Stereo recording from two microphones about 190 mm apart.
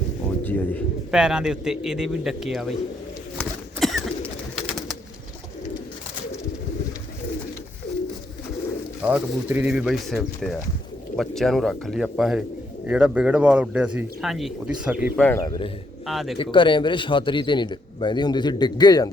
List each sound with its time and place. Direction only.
0.3 s a sound: 10° left (ahead or behind)
1.1 s speech: 5° right (ahead or behind)
3.3 s bird: 5° left (ahead or behind)
9.0 s speech: 5° right (ahead or behind)
15.2 s a man's voice: 15° left (ahead or behind)
16.0 s speech: centre (ahead or behind)
16.4 s a man's voice: 25° left (ahead or behind)